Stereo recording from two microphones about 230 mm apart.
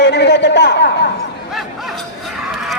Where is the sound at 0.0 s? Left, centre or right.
Left.